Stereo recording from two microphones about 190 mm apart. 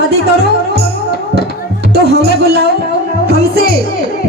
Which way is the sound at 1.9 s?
60° right (ahead or behind).